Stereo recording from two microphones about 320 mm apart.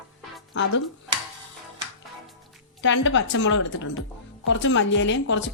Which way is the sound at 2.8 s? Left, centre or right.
Left.